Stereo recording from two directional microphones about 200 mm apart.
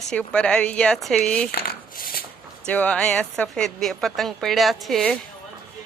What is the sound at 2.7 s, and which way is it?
A woman's voice, 5° left (ahead or behind).